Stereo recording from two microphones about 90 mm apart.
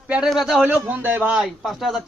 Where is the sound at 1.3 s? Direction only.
5° right (ahead or behind).